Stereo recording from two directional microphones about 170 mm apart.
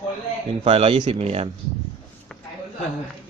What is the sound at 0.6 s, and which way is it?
Speech, 40° right (ahead or behind).